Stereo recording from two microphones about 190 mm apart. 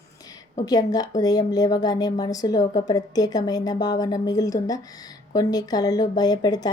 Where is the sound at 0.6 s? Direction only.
20° left (ahead or behind).